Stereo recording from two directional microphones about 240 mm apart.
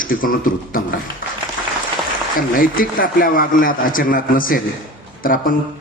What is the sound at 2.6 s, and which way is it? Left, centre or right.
A man's voice, left.